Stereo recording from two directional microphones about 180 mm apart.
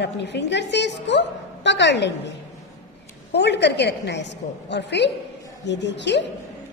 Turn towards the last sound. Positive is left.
turn(degrees=75)  # may be behind; listen again after turning